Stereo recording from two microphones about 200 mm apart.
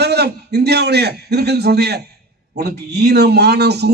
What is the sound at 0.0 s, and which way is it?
A man's voice, 55° right (ahead or behind).